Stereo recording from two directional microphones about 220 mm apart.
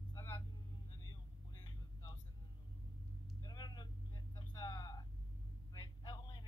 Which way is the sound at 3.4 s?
20° left (ahead or behind).